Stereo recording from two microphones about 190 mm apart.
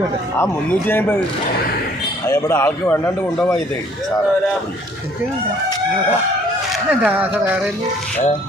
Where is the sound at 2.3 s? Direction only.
15° left (ahead or behind).